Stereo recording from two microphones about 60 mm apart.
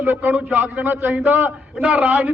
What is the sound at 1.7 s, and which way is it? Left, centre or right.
Speech, centre.